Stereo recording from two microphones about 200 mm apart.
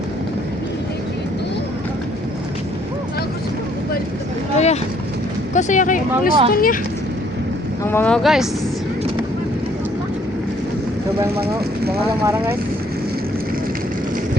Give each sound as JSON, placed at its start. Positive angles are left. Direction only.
{"t": 4.5, "sound": "a sound", "side_deg": 35}
{"t": 5.5, "sound": "speech", "side_deg": 40}
{"t": 7.9, "sound": "speech", "side_deg": 10}
{"t": 12.2, "sound": "speech", "side_deg": -10}